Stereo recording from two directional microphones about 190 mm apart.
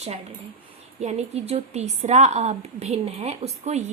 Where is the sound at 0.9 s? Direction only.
35° right (ahead or behind).